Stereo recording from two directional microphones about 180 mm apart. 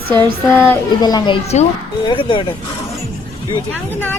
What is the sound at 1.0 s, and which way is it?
Speech, 20° left (ahead or behind).